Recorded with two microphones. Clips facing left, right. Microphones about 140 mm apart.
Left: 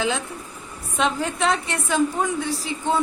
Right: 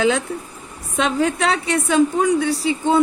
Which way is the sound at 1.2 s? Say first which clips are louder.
Right 4 dB; 75° right (ahead or behind).